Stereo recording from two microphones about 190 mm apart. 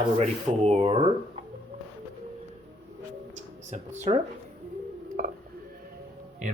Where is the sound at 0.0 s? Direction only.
35° right (ahead or behind).